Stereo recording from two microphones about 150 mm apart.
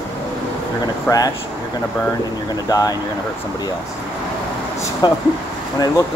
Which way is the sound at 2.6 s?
25° left (ahead or behind).